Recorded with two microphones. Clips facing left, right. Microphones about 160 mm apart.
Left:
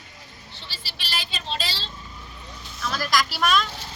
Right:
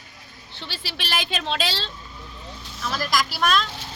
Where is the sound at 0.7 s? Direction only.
60° right (ahead or behind).